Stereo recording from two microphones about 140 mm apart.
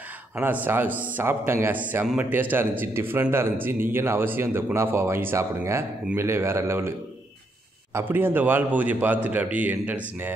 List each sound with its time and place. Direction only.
0.4 s a man's voice: 15° right (ahead or behind)
7.9 s a man's voice: 15° right (ahead or behind)